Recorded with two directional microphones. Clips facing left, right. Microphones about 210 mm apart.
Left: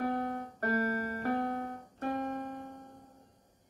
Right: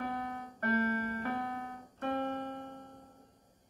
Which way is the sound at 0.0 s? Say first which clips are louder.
Left 5 dB; 45° left (ahead or behind).